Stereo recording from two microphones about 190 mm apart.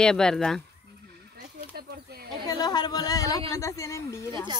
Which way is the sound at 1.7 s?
55° right (ahead or behind).